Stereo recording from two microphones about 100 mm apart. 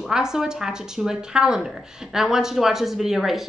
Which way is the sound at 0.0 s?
5° right (ahead or behind).